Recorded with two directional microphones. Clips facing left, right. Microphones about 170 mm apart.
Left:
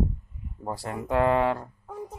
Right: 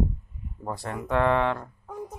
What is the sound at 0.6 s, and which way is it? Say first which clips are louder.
Speech: even; 30° left (ahead or behind).